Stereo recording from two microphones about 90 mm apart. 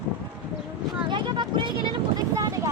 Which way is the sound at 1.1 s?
60° right (ahead or behind).